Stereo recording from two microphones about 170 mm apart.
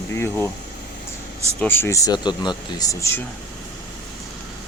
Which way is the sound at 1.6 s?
15° left (ahead or behind).